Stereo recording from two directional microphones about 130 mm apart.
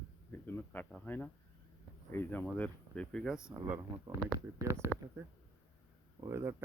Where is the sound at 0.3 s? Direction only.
15° left (ahead or behind).